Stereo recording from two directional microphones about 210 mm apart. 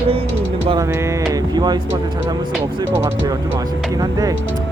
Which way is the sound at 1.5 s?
20° right (ahead or behind).